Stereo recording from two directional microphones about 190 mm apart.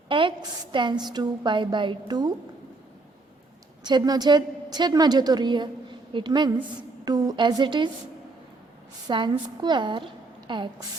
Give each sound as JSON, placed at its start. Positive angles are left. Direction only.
{"t": 0.1, "sound": "a woman's voice", "side_deg": -25}
{"t": 3.8, "sound": "a woman's voice", "side_deg": -20}
{"t": 9.0, "sound": "a woman's voice", "side_deg": -25}